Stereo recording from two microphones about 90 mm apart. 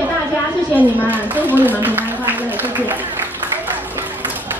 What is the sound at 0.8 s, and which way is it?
A woman's voice, 20° right (ahead or behind).